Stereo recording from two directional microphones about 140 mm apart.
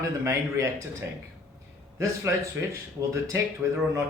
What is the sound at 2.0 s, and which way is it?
Speech, 20° right (ahead or behind).